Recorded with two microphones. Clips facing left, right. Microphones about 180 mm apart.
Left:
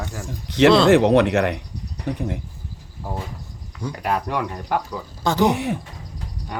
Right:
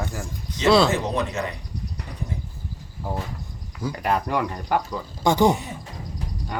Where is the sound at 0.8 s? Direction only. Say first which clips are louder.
Left 10 dB; 70° left (ahead or behind).